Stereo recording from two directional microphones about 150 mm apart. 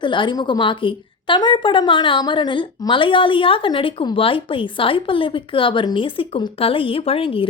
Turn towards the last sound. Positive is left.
turn(degrees=40)  # may be behind; listen again after turning